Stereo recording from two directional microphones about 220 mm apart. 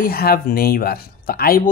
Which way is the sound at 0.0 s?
40° left (ahead or behind).